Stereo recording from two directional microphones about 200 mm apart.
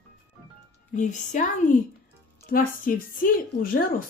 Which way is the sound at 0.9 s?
40° left (ahead or behind).